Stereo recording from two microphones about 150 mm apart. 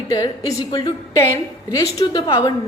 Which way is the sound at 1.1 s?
20° left (ahead or behind).